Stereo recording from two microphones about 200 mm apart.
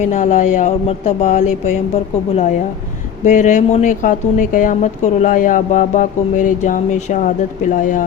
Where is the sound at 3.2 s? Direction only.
35° left (ahead or behind).